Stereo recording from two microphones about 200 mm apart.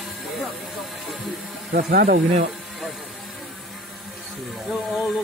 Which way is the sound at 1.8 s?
45° right (ahead or behind).